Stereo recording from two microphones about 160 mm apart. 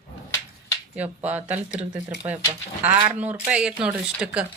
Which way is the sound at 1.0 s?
10° right (ahead or behind).